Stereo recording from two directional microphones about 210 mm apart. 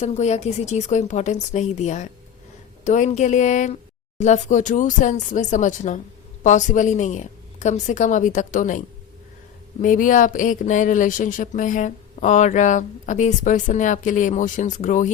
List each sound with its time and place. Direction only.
0.0 s speech: 30° left (ahead or behind)
9.8 s speech: 40° left (ahead or behind)